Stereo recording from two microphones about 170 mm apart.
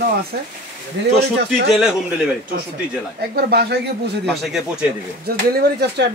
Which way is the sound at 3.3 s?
70° right (ahead or behind).